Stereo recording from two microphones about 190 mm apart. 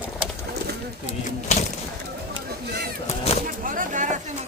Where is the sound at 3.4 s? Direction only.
45° right (ahead or behind).